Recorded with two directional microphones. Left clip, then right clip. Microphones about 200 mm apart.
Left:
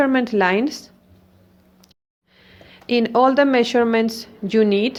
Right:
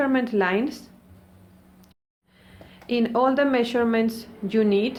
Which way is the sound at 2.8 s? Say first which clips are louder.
Left 6 dB; 35° left (ahead or behind).